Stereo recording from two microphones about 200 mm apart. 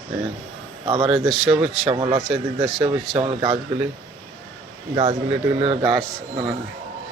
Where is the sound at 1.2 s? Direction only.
Centre (ahead or behind).